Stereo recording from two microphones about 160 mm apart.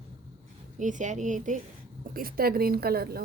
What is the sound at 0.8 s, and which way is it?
Speech, 50° right (ahead or behind).